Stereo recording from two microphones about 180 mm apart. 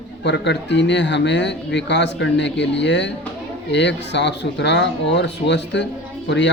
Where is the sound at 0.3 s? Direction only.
75° left (ahead or behind).